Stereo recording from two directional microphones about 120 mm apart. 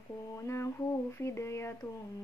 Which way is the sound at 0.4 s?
25° left (ahead or behind).